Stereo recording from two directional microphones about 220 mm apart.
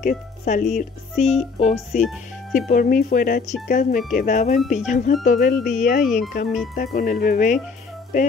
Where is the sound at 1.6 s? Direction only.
30° left (ahead or behind).